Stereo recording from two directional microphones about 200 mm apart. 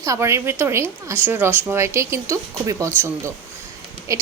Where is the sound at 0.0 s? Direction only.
15° right (ahead or behind).